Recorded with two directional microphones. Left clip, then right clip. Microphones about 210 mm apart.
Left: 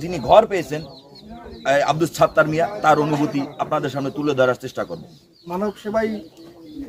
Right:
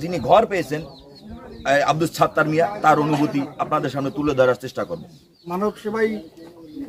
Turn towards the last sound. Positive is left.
turn(degrees=-5)  # may be behind; listen again after turning